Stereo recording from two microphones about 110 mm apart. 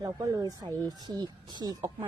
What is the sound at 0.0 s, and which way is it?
Speech, 35° right (ahead or behind).